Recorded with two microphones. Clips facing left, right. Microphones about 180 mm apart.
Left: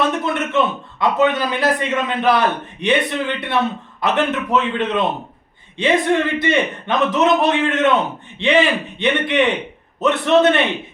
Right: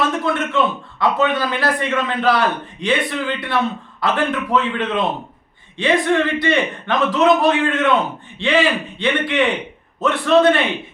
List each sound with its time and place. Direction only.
0.3 s a man's voice: 20° left (ahead or behind)